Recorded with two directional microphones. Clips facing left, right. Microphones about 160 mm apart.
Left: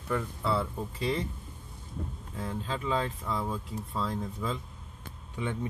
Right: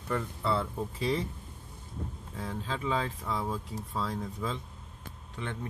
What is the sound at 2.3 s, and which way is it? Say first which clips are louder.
Speech: left 1 dB; centre (ahead or behind).